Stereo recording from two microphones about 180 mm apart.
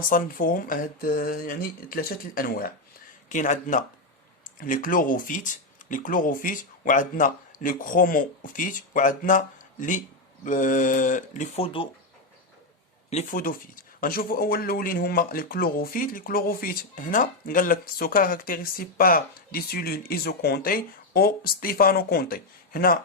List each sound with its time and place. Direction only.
0.1 s speech: 50° left (ahead or behind)
10.4 s speech: 45° left (ahead or behind); by 11.9 s 30° left (ahead or behind)
13.1 s speech: 40° left (ahead or behind)